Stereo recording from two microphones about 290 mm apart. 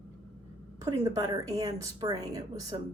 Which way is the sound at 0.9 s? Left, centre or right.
Centre.